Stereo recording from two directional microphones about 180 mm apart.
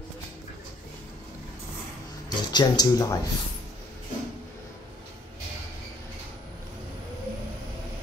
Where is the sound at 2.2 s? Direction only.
25° left (ahead or behind).